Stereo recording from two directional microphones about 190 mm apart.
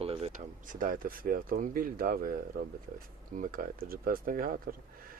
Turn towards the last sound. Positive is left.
turn(degrees=-50)  # may be behind; listen again after turning